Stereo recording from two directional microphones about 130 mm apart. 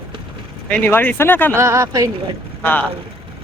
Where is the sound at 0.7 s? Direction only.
15° left (ahead or behind).